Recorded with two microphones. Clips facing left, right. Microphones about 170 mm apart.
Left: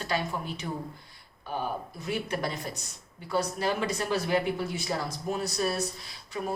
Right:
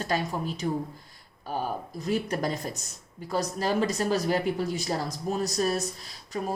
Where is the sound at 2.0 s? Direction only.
40° right (ahead or behind).